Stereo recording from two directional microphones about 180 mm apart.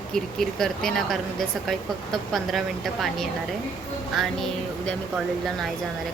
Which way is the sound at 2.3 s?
Centre (ahead or behind).